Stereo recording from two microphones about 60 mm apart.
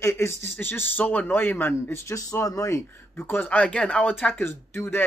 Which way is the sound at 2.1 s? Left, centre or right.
Left.